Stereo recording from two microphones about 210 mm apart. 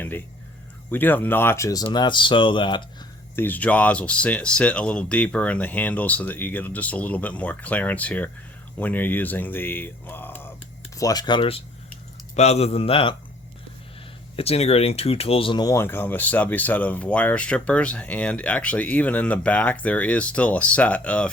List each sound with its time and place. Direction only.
0.9 s speech: 10° left (ahead or behind)
3.3 s a man's voice: 10° left (ahead or behind); by 13.1 s 25° left (ahead or behind)
14.3 s speech: 30° left (ahead or behind); by 21.2 s 5° left (ahead or behind)